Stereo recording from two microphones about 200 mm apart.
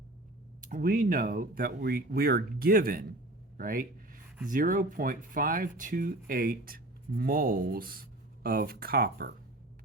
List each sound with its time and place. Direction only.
0.7 s speech: 45° right (ahead or behind)